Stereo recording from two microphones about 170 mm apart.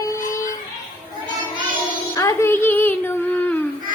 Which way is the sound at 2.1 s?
15° left (ahead or behind).